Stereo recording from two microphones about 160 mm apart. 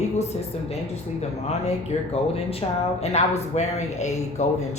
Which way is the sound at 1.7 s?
40° left (ahead or behind).